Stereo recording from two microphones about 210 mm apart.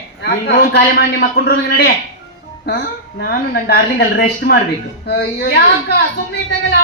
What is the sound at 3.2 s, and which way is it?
A man's voice, 50° left (ahead or behind).